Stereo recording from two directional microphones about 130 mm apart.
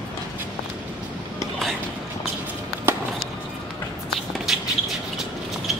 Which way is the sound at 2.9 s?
15° right (ahead or behind).